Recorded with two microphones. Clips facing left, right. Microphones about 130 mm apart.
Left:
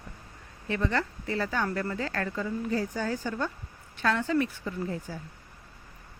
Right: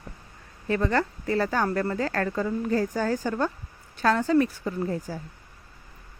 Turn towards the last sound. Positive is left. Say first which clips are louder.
# right 5 dB
turn(degrees=-40)  # may be behind; listen again after turning